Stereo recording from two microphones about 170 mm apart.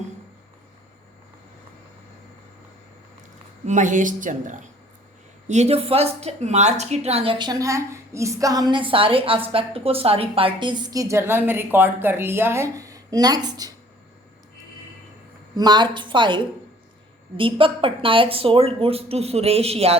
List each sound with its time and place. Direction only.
3.7 s a woman's voice: 45° right (ahead or behind); by 13.7 s 25° right (ahead or behind)
15.5 s a woman's voice: 25° right (ahead or behind)